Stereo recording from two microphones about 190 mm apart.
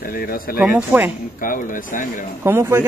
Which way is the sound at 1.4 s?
45° left (ahead or behind).